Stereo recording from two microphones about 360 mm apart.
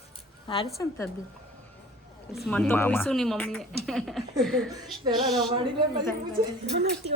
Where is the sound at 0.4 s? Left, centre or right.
Centre.